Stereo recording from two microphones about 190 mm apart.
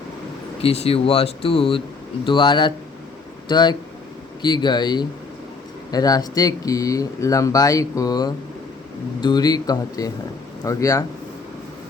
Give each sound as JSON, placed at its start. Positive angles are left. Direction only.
{"t": 0.6, "sound": "speech", "side_deg": 30}